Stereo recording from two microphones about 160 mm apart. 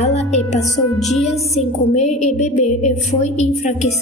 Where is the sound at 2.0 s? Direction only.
45° left (ahead or behind).